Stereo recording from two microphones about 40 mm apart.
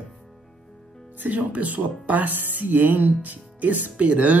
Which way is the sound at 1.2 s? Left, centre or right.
Right.